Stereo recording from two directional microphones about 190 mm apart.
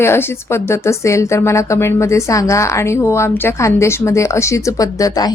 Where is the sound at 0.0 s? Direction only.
10° left (ahead or behind).